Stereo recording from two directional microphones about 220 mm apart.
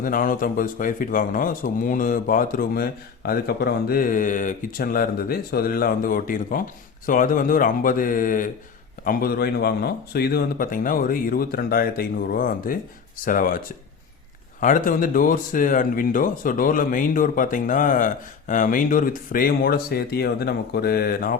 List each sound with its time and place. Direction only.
0.0 s speech: 40° left (ahead or behind)
14.6 s speech: 35° left (ahead or behind)